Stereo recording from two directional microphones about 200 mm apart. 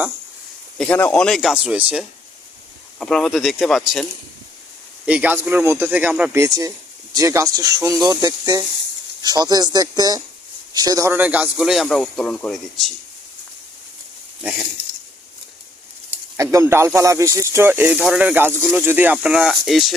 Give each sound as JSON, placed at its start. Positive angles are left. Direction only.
{"t": 0.8, "sound": "speech", "side_deg": 10}
{"t": 5.0, "sound": "speech", "side_deg": -5}
{"t": 16.4, "sound": "speech", "side_deg": -15}